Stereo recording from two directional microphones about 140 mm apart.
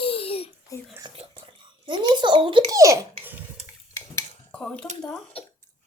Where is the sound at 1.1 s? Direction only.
45° right (ahead or behind).